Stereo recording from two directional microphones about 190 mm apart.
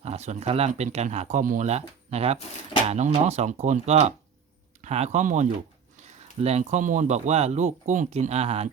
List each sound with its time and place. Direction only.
0.0 s speech: 35° right (ahead or behind)